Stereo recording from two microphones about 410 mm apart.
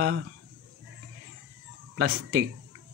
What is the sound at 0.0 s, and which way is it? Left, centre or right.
Speech, right.